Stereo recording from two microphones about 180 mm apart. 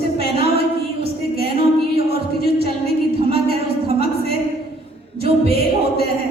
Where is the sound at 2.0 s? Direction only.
35° right (ahead or behind).